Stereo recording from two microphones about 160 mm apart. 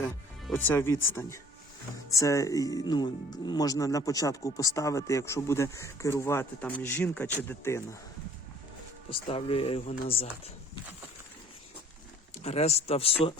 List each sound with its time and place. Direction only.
0.5 s speech: 15° left (ahead or behind)
9.0 s speech: 35° left (ahead or behind)
12.4 s speech: 40° left (ahead or behind)